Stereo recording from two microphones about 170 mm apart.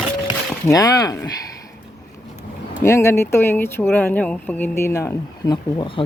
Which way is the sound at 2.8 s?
15° left (ahead or behind).